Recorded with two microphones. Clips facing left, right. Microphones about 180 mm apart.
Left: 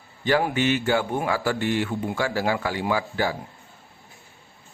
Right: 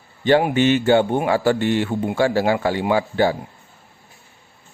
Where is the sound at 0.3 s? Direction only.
25° right (ahead or behind).